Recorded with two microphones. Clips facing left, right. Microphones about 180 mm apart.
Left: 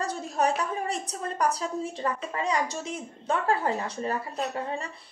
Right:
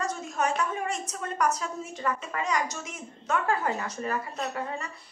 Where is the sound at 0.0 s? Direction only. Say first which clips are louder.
Left 2 dB; 35° left (ahead or behind).